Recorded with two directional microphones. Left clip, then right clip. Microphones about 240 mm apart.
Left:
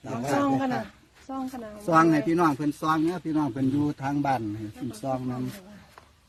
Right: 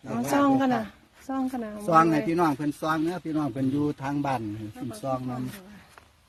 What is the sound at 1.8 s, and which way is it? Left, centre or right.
Speech, centre.